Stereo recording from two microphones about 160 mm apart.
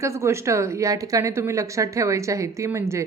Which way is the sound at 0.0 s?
15° right (ahead or behind).